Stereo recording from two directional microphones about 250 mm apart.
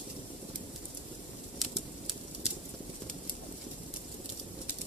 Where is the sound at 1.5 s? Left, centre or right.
Centre.